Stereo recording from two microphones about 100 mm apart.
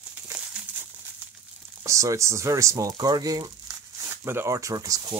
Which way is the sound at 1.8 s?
35° right (ahead or behind).